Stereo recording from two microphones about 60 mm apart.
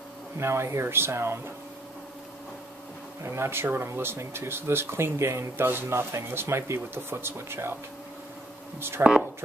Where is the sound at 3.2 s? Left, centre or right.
Right.